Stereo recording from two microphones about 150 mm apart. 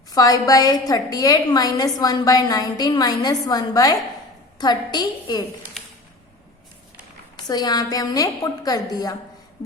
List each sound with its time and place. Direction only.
0.1 s a woman's voice: 25° left (ahead or behind)
7.3 s a woman's voice: 25° left (ahead or behind)